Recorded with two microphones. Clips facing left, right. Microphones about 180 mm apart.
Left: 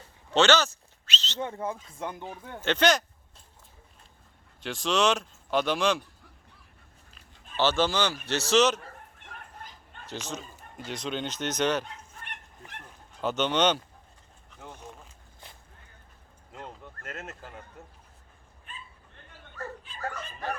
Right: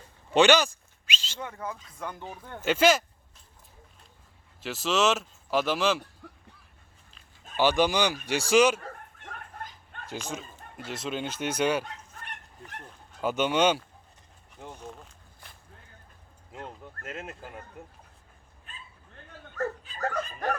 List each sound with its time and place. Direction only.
0.3 s a sound: 15° right (ahead or behind)
1.4 s speech: 25° left (ahead or behind)
2.4 s speech: 5° left (ahead or behind)
2.6 s speech: 5° right (ahead or behind)
4.6 s speech: 5° right (ahead or behind)
7.5 s speech: 15° right (ahead or behind)
10.1 s speech: 10° right (ahead or behind)
13.2 s speech: 10° right (ahead or behind)
14.8 s a sound: centre (ahead or behind)
16.5 s a sound: 5° right (ahead or behind)
17.1 s speech: 10° right (ahead or behind)
19.5 s dog: 40° right (ahead or behind)